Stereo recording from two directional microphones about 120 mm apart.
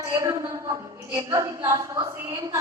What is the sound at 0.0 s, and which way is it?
A woman's voice, 25° right (ahead or behind).